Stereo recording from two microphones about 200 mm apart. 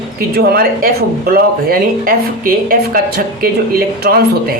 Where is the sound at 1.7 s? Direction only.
45° right (ahead or behind).